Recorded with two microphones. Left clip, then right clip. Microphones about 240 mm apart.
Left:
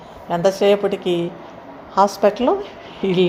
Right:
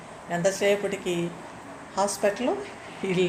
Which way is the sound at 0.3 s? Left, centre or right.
Left.